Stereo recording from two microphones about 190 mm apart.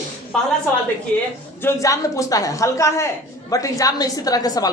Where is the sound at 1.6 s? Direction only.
15° left (ahead or behind).